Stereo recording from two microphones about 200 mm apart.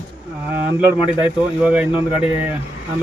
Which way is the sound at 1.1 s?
5° right (ahead or behind).